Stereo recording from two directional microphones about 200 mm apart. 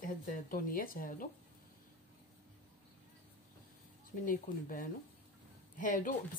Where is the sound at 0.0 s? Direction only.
45° left (ahead or behind).